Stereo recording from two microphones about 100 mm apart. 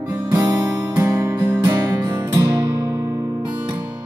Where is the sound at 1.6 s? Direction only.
40° right (ahead or behind).